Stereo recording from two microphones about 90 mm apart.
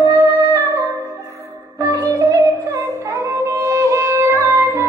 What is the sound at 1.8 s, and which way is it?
Music, 40° right (ahead or behind).